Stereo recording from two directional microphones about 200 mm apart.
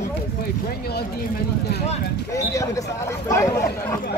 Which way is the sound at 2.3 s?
15° left (ahead or behind).